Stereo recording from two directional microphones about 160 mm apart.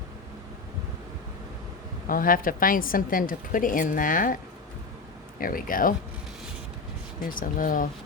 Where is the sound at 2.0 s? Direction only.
60° left (ahead or behind).